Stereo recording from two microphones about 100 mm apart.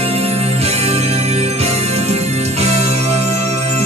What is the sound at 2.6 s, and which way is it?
Music, 90° right.